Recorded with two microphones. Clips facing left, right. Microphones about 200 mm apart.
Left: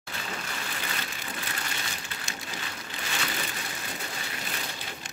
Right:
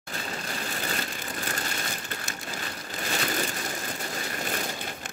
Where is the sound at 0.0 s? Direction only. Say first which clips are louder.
Right 2 dB; 40° right (ahead or behind).